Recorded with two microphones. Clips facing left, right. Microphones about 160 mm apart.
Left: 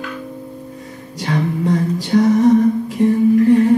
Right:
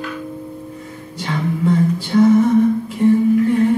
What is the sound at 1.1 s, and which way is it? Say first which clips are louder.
Music: left 2 dB; 40° left (ahead or behind).